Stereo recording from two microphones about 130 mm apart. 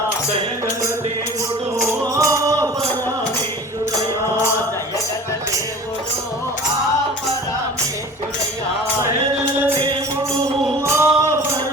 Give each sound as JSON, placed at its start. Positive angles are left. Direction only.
{"t": 2.1, "sound": "music", "side_deg": -25}
{"t": 9.7, "sound": "music", "side_deg": -35}
{"t": 10.8, "sound": "a sound", "side_deg": -20}